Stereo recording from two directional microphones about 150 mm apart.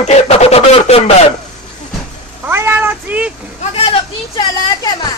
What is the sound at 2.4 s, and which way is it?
Cat, 15° right (ahead or behind).